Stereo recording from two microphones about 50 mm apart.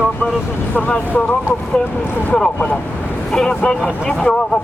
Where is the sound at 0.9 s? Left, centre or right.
Left.